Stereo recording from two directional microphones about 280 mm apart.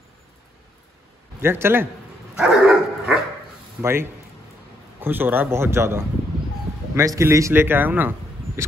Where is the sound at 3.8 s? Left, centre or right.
Centre.